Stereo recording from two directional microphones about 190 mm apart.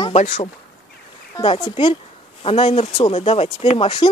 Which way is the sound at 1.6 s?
25° left (ahead or behind).